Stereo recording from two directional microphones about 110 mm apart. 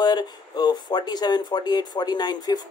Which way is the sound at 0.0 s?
40° left (ahead or behind).